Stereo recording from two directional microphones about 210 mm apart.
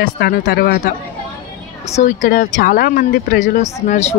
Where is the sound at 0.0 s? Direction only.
45° left (ahead or behind).